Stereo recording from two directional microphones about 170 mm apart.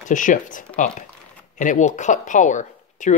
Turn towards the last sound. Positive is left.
turn(degrees=45)  # may be behind; listen again after turning